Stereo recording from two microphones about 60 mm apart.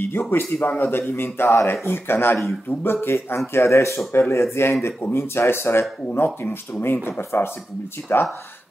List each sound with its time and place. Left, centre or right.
0.0 s speech: left
3.3 s speech: left
6.2 s speech: left